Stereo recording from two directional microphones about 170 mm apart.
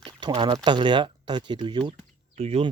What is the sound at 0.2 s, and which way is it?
Speech, 30° right (ahead or behind).